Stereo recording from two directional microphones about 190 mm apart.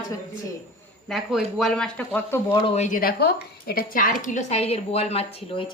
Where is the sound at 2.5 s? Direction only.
35° left (ahead or behind).